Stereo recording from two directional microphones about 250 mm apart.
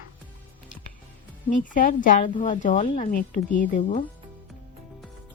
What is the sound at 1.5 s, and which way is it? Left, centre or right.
A woman's voice, left.